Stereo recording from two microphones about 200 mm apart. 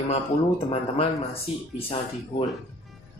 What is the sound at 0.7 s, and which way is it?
Speech, 30° left (ahead or behind).